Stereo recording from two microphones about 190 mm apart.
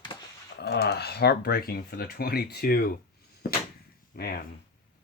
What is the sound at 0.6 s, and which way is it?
Speech, 60° left (ahead or behind).